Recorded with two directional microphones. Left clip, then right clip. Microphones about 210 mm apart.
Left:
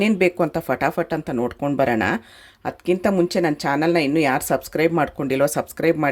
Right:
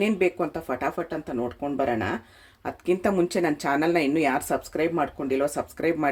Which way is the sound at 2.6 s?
25° left (ahead or behind).